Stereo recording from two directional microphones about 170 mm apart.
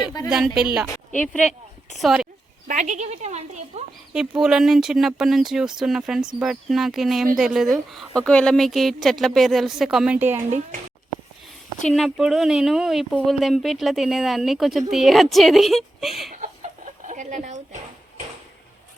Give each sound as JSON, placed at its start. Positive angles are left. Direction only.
{"t": 0.3, "sound": "speech", "side_deg": -5}
{"t": 1.1, "sound": "speech", "side_deg": 5}
{"t": 2.6, "sound": "speech", "side_deg": -45}
{"t": 4.1, "sound": "speech", "side_deg": -5}
{"t": 11.9, "sound": "speech", "side_deg": 0}
{"t": 16.3, "sound": "chicken", "side_deg": -45}